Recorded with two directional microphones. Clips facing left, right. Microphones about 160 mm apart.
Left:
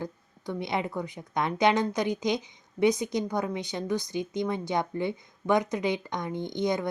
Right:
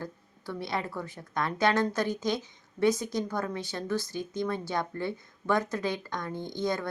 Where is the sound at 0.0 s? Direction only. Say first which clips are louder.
Left 3 dB; 20° left (ahead or behind).